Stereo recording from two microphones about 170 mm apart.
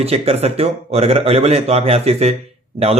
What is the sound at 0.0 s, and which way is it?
Speech, 35° right (ahead or behind).